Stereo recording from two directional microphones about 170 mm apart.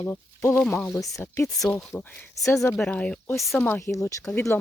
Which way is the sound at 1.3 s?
15° left (ahead or behind).